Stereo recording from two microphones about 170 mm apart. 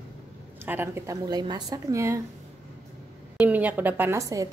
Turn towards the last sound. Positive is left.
turn(degrees=-20)  # may be behind; listen again after turning